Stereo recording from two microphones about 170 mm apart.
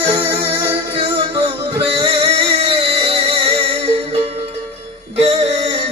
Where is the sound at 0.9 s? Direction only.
30° right (ahead or behind).